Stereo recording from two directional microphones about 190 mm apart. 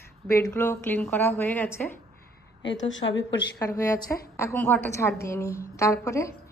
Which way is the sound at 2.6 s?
75° left (ahead or behind).